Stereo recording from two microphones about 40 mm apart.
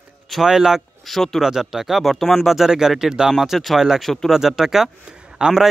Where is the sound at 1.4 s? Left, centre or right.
Centre.